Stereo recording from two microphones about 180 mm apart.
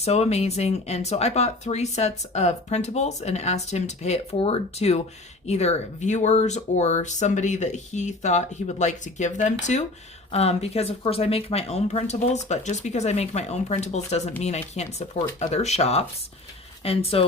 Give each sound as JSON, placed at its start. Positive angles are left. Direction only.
{"t": 0.0, "sound": "speech", "side_deg": 35}